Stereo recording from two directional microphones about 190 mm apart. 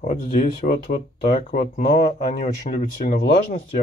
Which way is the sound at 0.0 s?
35° left (ahead or behind).